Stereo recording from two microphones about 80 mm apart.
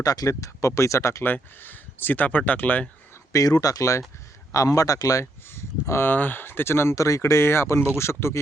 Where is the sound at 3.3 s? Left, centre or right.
Left.